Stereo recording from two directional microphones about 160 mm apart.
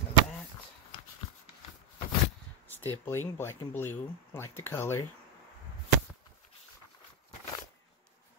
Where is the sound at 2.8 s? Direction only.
15° left (ahead or behind).